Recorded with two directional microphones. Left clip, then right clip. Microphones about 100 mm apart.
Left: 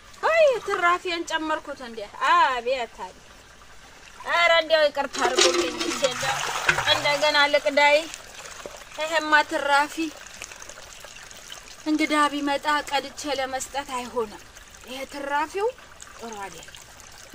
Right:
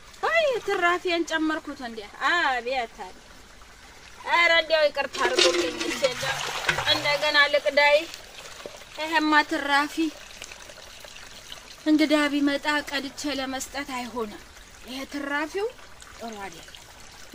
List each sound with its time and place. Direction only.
0.2 s speech: 15° right (ahead or behind)
4.3 s speech: 5° left (ahead or behind)
5.1 s speech: 50° left (ahead or behind)
6.1 s speech: 90° left
7.1 s speech: 15° left (ahead or behind)
9.0 s speech: centre (ahead or behind)
11.8 s speech: 30° right (ahead or behind)